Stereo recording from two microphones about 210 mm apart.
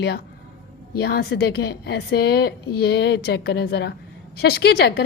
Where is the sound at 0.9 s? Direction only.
50° left (ahead or behind).